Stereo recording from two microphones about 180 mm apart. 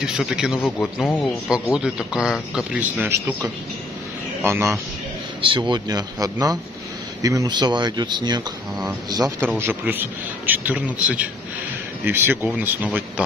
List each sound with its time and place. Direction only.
0.0 s speech: 5° right (ahead or behind)
4.4 s a man's voice: 15° right (ahead or behind)
5.4 s a man's voice: 25° right (ahead or behind); by 13.0 s 10° right (ahead or behind)